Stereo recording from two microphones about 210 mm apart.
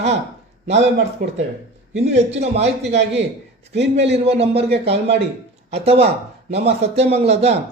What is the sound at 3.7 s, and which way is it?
Speech, 55° right (ahead or behind).